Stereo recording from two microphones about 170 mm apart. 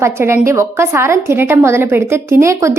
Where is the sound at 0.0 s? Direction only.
15° right (ahead or behind).